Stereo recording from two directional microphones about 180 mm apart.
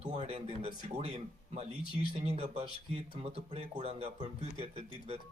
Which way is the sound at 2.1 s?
35° right (ahead or behind).